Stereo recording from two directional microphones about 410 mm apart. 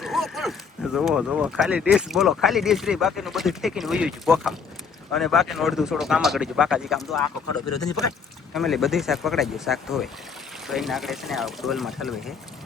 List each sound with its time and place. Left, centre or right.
0.0 s a sound: centre
0.9 s speech: centre
7.4 s speech: left
8.5 s speech: centre